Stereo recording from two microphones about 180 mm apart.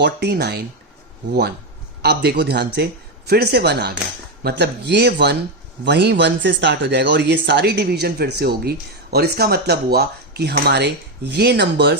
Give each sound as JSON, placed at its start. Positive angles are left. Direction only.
{"t": 0.0, "sound": "speech", "side_deg": -65}